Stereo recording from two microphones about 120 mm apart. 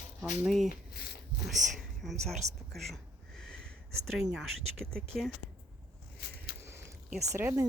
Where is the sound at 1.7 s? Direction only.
Centre (ahead or behind).